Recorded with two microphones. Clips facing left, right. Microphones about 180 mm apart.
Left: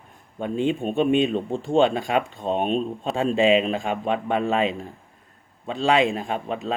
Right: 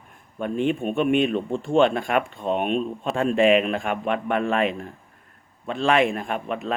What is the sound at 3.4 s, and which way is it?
A man's voice, 20° left (ahead or behind).